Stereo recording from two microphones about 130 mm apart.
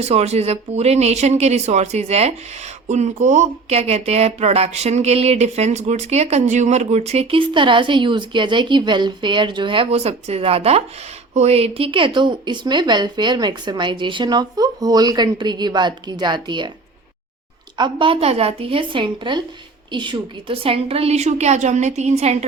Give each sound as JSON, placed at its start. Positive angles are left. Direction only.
{"t": 0.0, "sound": "a woman's voice", "side_deg": -55}
{"t": 17.7, "sound": "a woman's voice", "side_deg": -40}